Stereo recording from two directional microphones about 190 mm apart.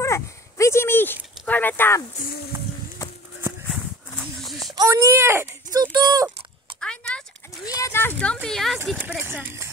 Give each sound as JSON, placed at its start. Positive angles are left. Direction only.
{"t": 0.0, "sound": "speech", "side_deg": 15}
{"t": 3.3, "sound": "horse", "side_deg": -10}
{"t": 4.2, "sound": "a sound", "side_deg": 0}
{"t": 4.7, "sound": "speech", "side_deg": -15}
{"t": 6.8, "sound": "a sound", "side_deg": 5}
{"t": 7.6, "sound": "speech", "side_deg": 15}